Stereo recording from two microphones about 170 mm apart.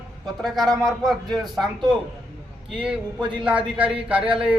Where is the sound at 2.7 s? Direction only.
5° right (ahead or behind).